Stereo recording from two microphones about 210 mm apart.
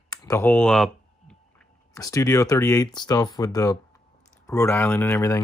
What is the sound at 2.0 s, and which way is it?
Speech, 15° left (ahead or behind).